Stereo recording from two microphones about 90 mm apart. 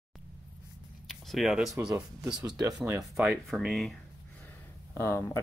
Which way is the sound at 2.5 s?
45° right (ahead or behind).